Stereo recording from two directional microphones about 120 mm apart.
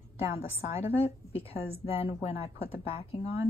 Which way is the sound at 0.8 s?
60° left (ahead or behind).